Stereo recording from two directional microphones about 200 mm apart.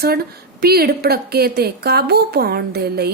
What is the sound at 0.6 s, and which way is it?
A woman's voice, 50° right (ahead or behind).